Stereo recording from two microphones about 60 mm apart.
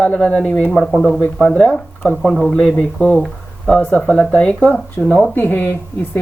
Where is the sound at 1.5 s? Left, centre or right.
Centre.